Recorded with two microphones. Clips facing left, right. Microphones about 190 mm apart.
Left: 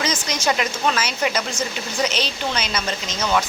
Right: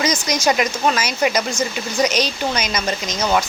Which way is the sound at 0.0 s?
10° right (ahead or behind).